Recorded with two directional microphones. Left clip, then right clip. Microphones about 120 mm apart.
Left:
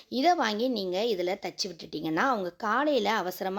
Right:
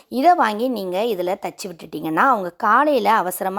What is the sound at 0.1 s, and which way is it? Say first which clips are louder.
A woman's voice: right 10 dB; 55° right (ahead or behind).